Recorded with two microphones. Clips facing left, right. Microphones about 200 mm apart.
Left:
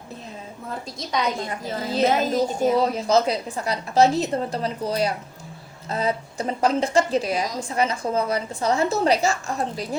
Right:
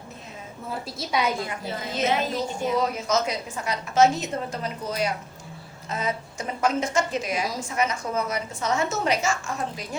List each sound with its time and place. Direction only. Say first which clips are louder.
0.7 s a woman's voice: even; 5° right (ahead or behind)
1.5 s a woman's voice: left 4 dB; 35° left (ahead or behind)